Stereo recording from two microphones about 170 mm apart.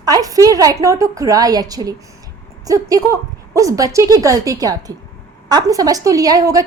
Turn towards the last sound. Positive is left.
turn(degrees=-20)  # may be behind; listen again after turning